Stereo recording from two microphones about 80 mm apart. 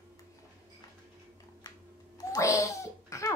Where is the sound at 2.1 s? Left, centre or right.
Left.